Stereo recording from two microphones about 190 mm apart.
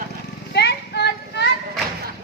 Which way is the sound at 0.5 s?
60° left (ahead or behind).